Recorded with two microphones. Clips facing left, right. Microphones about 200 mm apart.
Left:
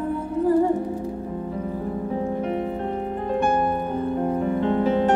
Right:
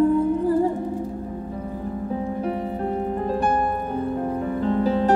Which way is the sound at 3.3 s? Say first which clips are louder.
Left 2 dB; 35° right (ahead or behind).